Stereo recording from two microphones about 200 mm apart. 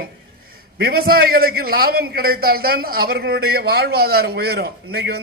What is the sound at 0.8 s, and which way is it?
A man's voice, 50° right (ahead or behind).